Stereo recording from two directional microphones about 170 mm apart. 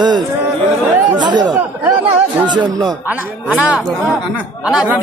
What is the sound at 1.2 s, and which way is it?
Speech, 25° right (ahead or behind).